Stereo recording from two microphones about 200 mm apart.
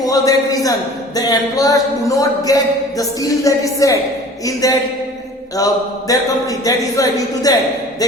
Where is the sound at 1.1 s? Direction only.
20° left (ahead or behind).